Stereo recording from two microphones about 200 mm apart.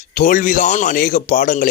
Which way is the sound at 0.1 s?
40° left (ahead or behind).